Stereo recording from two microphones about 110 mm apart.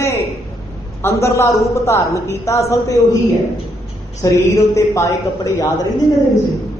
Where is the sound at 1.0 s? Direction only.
25° left (ahead or behind).